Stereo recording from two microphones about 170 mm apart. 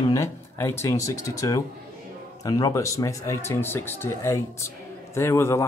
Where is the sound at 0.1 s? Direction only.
15° left (ahead or behind).